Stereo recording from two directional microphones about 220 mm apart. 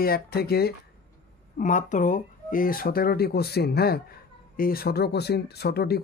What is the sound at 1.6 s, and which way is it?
Speech, 35° left (ahead or behind).